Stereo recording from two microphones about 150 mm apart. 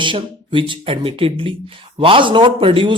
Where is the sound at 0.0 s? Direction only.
35° right (ahead or behind).